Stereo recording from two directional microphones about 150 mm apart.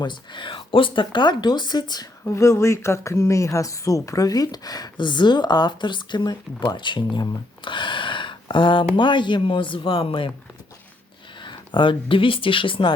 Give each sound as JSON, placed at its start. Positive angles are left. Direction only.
{"t": 0.0, "sound": "speech", "side_deg": 30}
{"t": 11.3, "sound": "speech", "side_deg": 30}